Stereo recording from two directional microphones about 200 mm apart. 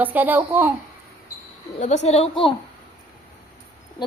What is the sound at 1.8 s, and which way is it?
Speech, 35° left (ahead or behind).